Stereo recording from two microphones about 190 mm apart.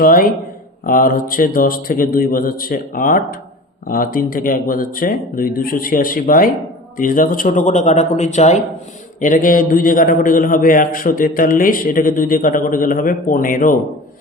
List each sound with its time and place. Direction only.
0.0 s a man's voice: 45° left (ahead or behind)